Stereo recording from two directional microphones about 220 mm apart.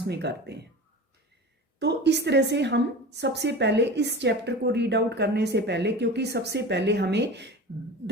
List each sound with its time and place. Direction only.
0.1 s a woman's voice: 50° right (ahead or behind)
1.8 s a woman's voice: 50° right (ahead or behind)